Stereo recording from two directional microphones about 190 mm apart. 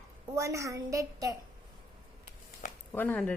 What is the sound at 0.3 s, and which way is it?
A woman's voice, 15° right (ahead or behind).